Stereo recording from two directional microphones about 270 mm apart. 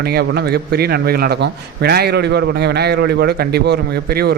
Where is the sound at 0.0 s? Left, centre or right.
Right.